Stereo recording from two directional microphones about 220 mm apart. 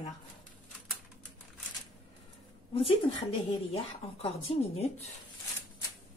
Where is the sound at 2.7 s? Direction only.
25° left (ahead or behind).